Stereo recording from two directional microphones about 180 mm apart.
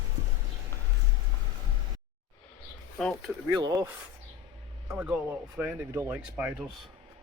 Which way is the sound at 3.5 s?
20° right (ahead or behind).